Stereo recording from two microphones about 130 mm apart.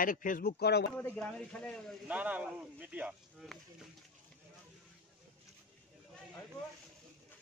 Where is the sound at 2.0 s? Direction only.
10° right (ahead or behind).